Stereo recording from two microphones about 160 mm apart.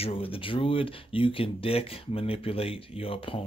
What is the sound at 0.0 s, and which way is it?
Speech, 35° left (ahead or behind).